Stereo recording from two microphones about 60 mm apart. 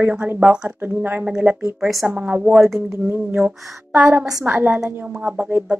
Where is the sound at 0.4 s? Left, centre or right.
Centre.